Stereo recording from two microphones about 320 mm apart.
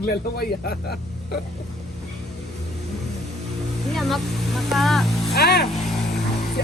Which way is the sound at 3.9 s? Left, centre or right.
Centre.